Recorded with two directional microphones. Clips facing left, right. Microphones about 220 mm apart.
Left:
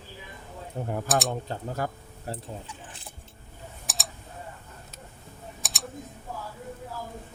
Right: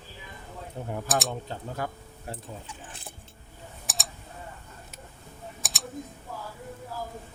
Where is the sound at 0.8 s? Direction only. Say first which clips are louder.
Left 4 dB; 45° left (ahead or behind).